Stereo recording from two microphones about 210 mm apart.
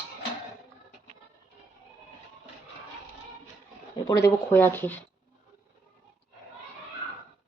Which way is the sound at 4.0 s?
15° left (ahead or behind).